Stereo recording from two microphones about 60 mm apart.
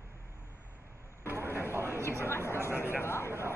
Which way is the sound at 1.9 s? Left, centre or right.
Left.